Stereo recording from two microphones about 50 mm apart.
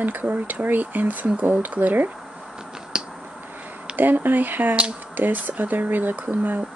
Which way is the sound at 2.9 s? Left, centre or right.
Centre.